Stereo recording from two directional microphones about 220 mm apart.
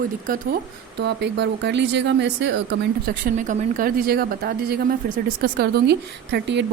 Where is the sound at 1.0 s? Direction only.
50° right (ahead or behind).